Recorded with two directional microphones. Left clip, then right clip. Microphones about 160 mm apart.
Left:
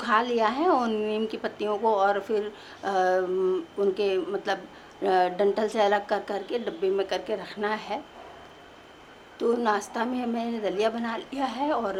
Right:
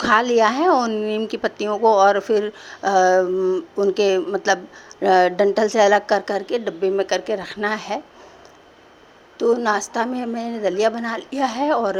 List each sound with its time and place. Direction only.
0.0 s a woman's voice: 40° right (ahead or behind)
3.3 s speech: 20° right (ahead or behind)
3.8 s a woman's voice: 40° right (ahead or behind)
9.4 s a woman's voice: 30° right (ahead or behind)